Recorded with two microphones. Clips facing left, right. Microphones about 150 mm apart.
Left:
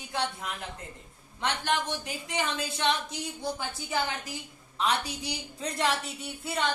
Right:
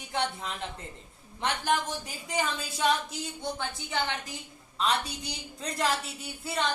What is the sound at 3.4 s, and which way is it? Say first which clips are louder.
A woman's voice: left 1 dB; 5° left (ahead or behind).